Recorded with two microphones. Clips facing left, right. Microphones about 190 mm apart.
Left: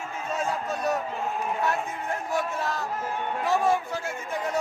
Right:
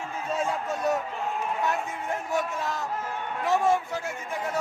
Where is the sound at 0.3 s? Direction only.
25° right (ahead or behind).